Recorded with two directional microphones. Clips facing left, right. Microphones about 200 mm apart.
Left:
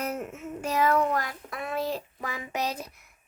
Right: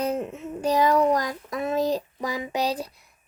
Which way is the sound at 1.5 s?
20° right (ahead or behind).